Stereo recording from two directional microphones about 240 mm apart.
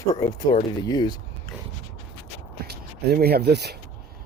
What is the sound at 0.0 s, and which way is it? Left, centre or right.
Speech, centre.